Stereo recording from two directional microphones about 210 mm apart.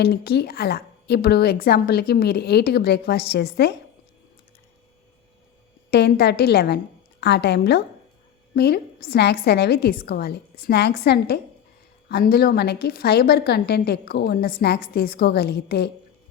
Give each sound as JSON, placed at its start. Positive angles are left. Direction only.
{"t": 0.0, "sound": "a woman's voice", "side_deg": 50}
{"t": 5.9, "sound": "a woman's voice", "side_deg": 50}